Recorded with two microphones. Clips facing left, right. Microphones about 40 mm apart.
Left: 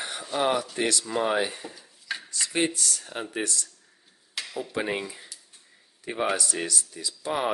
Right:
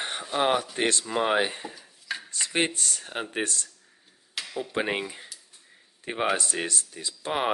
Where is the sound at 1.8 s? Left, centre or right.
Centre.